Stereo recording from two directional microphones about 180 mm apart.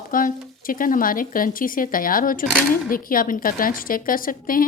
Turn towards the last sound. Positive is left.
turn(degrees=50)  # may be behind; listen again after turning